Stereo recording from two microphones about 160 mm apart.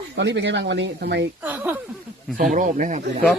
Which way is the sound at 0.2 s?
90° right.